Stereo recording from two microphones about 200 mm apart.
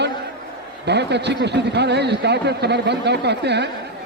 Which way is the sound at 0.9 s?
55° right (ahead or behind).